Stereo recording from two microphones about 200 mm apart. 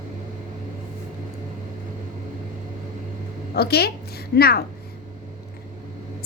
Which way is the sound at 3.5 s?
50° left (ahead or behind).